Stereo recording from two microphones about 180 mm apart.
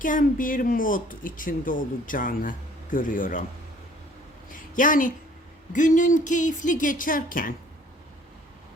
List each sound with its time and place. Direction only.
0.0 s speech: 50° left (ahead or behind)
4.5 s a woman's voice: 50° left (ahead or behind)